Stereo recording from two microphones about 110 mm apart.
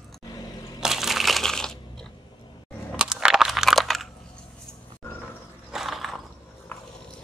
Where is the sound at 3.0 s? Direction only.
5° right (ahead or behind).